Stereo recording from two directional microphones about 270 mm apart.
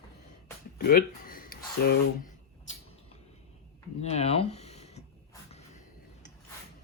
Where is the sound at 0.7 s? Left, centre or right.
Left.